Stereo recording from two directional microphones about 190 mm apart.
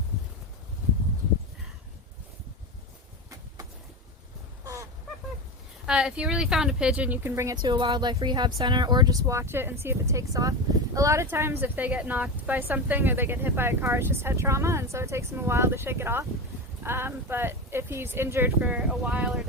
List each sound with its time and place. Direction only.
5.8 s speech: 5° right (ahead or behind)